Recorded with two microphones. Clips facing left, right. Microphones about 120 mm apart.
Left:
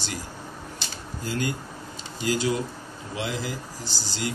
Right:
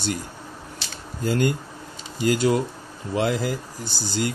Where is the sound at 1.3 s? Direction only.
55° right (ahead or behind).